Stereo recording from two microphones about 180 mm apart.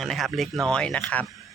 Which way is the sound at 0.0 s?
Centre (ahead or behind).